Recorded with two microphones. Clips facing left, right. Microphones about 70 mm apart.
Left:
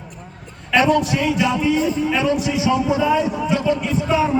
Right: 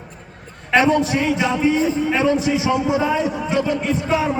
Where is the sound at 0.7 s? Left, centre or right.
Right.